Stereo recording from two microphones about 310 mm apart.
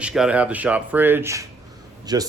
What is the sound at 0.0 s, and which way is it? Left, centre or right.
Speech, centre.